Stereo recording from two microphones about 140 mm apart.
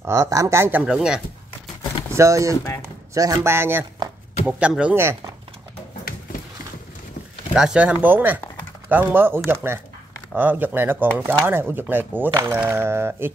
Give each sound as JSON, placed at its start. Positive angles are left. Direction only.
{"t": 0.0, "sound": "speech", "side_deg": -20}
{"t": 2.1, "sound": "speech", "side_deg": -20}
{"t": 7.5, "sound": "speech", "side_deg": -5}